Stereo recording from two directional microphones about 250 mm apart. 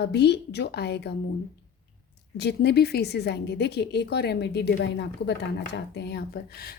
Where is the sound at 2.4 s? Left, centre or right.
Left.